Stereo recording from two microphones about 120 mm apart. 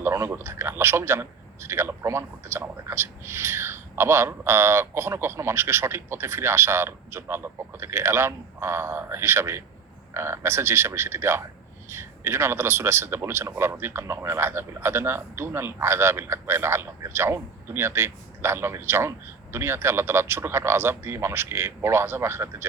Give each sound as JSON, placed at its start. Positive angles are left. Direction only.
{"t": 0.0, "sound": "a man's voice", "side_deg": -20}